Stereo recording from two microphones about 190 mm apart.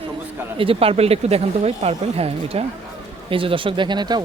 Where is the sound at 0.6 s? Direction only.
30° right (ahead or behind).